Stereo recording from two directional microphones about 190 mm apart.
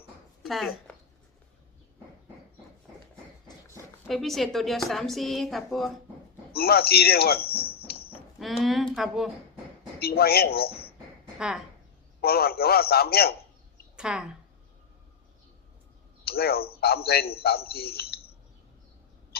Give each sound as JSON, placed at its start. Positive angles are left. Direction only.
{"t": 0.4, "sound": "speech", "side_deg": 0}
{"t": 4.0, "sound": "a woman's voice", "side_deg": 0}
{"t": 6.5, "sound": "speech", "side_deg": 55}
{"t": 7.9, "sound": "music", "side_deg": 55}
{"t": 8.4, "sound": "a woman's voice", "side_deg": 0}
{"t": 10.0, "sound": "a man's voice", "side_deg": 55}
{"t": 11.3, "sound": "speech", "side_deg": -5}
{"t": 12.2, "sound": "a man's voice", "side_deg": 55}
{"t": 13.9, "sound": "a woman's voice", "side_deg": -5}
{"t": 16.2, "sound": "a man's voice", "side_deg": 55}